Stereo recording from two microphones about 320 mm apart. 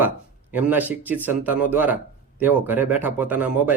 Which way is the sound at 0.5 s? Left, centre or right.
Centre.